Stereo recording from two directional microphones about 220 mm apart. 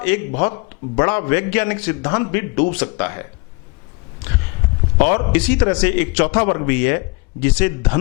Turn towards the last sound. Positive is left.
turn(degrees=10)  # may be behind; listen again after turning